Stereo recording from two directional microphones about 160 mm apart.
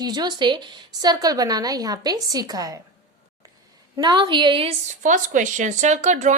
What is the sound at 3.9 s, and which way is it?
A woman's voice, 25° right (ahead or behind).